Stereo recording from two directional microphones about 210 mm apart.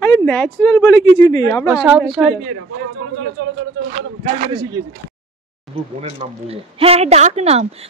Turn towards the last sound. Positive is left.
turn(degrees=-30)  # may be behind; listen again after turning